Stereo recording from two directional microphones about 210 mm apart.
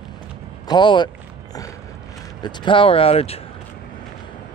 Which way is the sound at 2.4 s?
20° left (ahead or behind).